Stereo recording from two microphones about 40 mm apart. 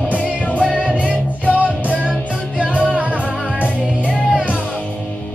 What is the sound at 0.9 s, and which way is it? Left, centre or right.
Music, right.